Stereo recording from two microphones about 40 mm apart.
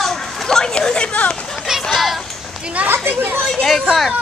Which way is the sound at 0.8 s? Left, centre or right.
Left.